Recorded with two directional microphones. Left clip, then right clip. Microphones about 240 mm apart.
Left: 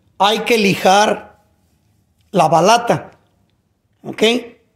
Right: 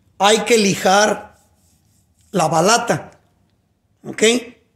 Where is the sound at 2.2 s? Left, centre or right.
Centre.